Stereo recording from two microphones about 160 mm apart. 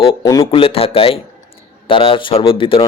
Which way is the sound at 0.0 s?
30° left (ahead or behind).